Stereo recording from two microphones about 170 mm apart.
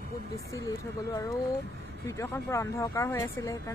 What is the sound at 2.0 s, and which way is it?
Speech, 15° left (ahead or behind).